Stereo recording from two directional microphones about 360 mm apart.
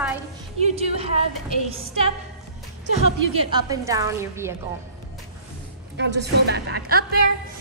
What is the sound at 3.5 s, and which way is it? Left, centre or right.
A woman's voice, centre.